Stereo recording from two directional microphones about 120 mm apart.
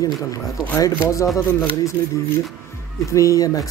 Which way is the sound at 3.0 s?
25° left (ahead or behind).